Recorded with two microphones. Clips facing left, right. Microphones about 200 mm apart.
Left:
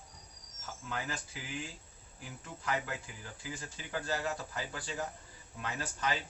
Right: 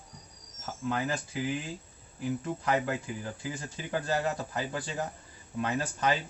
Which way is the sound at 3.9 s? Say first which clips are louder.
Right 6 dB; 55° right (ahead or behind).